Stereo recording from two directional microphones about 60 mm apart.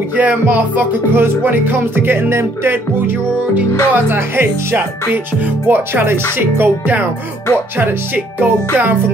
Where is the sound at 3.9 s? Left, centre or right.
Right.